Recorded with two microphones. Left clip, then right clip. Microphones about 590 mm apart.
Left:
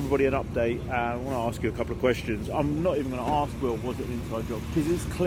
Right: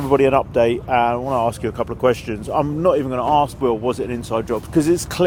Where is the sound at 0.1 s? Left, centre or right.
Right.